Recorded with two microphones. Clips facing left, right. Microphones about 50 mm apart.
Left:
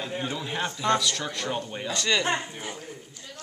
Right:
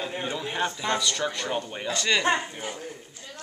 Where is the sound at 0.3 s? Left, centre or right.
Centre.